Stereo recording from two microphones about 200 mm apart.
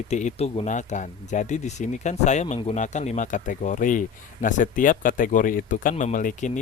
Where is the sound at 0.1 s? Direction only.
35° left (ahead or behind).